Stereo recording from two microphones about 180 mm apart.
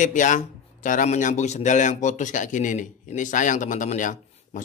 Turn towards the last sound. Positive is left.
turn(degrees=45)  # may be behind; listen again after turning